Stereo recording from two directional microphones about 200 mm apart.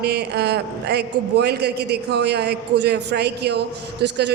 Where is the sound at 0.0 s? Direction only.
55° right (ahead or behind).